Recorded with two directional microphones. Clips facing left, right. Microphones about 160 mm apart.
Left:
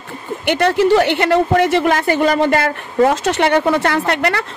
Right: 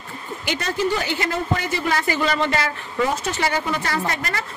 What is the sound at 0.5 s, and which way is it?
A woman's voice, 65° left (ahead or behind).